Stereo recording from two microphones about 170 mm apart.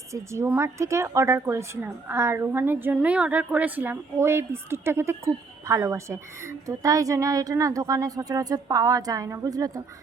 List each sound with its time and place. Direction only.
0.1 s a woman's voice: 15° right (ahead or behind)